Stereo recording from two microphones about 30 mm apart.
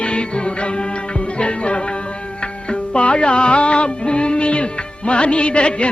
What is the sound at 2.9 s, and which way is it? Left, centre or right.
Music, left.